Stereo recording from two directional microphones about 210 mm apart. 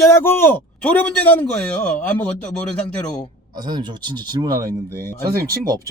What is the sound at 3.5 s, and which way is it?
Speech, 20° right (ahead or behind).